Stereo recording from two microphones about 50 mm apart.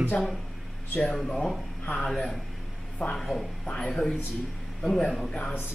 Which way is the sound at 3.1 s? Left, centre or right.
Centre.